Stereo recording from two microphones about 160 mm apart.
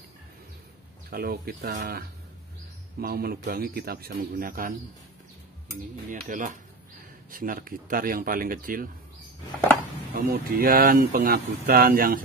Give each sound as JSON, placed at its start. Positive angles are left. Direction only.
{"t": 1.1, "sound": "speech", "side_deg": -70}
{"t": 6.0, "sound": "speech", "side_deg": -55}
{"t": 10.1, "sound": "speech", "side_deg": -70}